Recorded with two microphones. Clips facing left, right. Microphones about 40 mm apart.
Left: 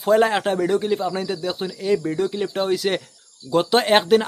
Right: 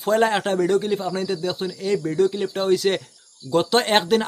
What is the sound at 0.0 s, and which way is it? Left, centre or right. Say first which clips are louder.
Speech: left 2 dB; centre.